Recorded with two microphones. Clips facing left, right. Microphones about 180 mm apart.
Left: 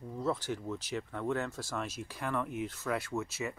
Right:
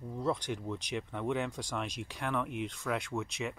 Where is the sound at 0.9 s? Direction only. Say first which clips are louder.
Even; 10° right (ahead or behind).